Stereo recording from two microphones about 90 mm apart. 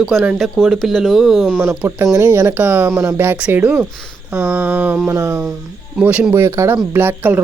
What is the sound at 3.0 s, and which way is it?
Speech, 30° right (ahead or behind).